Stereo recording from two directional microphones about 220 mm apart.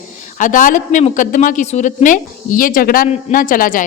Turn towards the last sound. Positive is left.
turn(degrees=40)  # may be behind; listen again after turning